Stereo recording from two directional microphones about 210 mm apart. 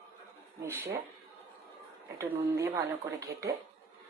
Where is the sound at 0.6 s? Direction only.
10° right (ahead or behind).